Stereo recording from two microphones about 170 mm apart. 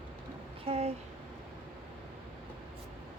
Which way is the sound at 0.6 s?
35° right (ahead or behind).